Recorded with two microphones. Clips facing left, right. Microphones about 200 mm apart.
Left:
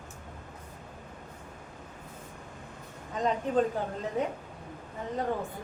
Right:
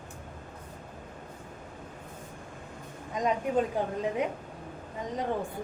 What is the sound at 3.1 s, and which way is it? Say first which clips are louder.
Speech: right 1 dB; 10° right (ahead or behind).